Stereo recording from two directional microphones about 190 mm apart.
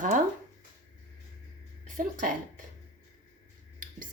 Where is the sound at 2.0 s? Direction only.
45° right (ahead or behind).